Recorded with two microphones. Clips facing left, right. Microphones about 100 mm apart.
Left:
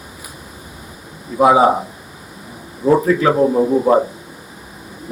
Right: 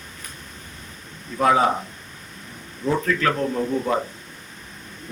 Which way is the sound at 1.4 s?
15° left (ahead or behind).